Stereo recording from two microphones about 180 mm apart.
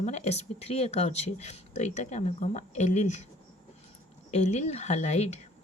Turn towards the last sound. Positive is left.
turn(degrees=40)  # may be behind; listen again after turning